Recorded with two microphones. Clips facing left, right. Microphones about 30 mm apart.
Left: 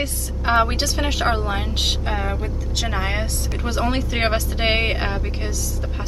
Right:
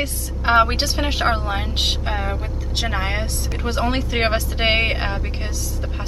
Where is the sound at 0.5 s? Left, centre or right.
Centre.